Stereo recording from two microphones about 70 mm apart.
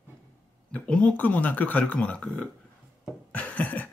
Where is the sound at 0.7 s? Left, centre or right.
Centre.